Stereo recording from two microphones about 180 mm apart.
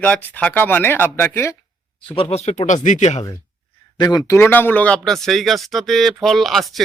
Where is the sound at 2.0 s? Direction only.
30° left (ahead or behind).